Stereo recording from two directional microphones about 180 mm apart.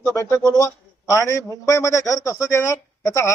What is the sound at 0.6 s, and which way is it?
A man's voice, 15° left (ahead or behind).